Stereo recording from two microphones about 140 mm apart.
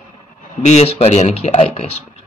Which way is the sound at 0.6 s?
55° left (ahead or behind).